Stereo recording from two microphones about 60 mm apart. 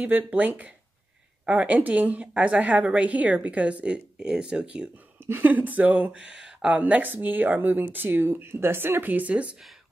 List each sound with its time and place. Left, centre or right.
0.0 s a woman's voice: right
5.2 s a woman's voice: right; by 6.8 s centre
6.8 s speech: right
9.3 s a woman's voice: centre